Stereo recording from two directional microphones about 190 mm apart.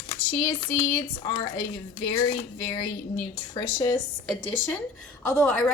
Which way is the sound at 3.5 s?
20° left (ahead or behind).